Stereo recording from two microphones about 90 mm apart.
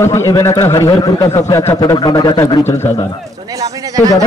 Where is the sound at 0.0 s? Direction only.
30° left (ahead or behind).